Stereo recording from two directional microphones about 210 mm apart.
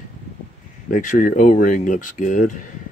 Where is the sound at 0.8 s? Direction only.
40° left (ahead or behind).